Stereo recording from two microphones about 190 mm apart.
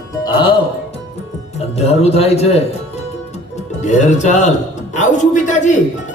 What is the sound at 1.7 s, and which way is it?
Speech, 35° left (ahead or behind).